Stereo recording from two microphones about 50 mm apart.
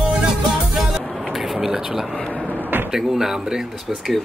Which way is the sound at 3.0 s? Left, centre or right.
Centre.